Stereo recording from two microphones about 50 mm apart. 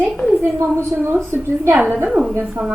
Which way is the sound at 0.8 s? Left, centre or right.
Right.